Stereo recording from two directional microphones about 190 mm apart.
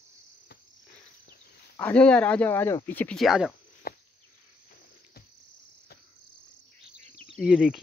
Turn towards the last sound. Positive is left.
turn(degrees=-5)  # may be behind; listen again after turning